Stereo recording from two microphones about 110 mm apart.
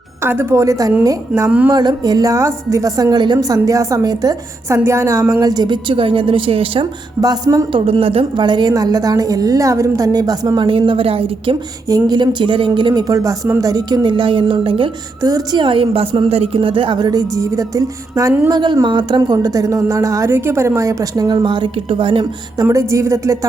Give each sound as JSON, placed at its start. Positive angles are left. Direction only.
{"t": 0.2, "sound": "speech", "side_deg": -20}
{"t": 1.5, "sound": "speech", "side_deg": -10}
{"t": 1.7, "sound": "a woman's voice", "side_deg": -40}
{"t": 3.3, "sound": "a woman's voice", "side_deg": -30}
{"t": 4.8, "sound": "speech", "side_deg": -25}
{"t": 7.2, "sound": "a woman's voice", "side_deg": -35}
{"t": 7.9, "sound": "a woman's voice", "side_deg": -60}
{"t": 11.9, "sound": "speech", "side_deg": -35}
{"t": 15.2, "sound": "a woman's voice", "side_deg": -35}
{"t": 15.6, "sound": "speech", "side_deg": -55}
{"t": 18.6, "sound": "a woman's voice", "side_deg": -45}
{"t": 22.6, "sound": "speech", "side_deg": -30}